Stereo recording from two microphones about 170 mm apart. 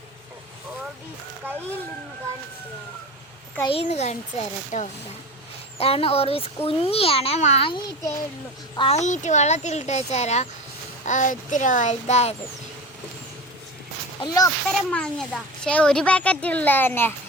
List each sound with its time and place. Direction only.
3.7 s a child's voice: 35° left (ahead or behind)
8.7 s a child's voice: 30° left (ahead or behind)
9.0 s speech: 45° left (ahead or behind)
14.2 s speech: 20° left (ahead or behind)
14.7 s speech: 5° left (ahead or behind)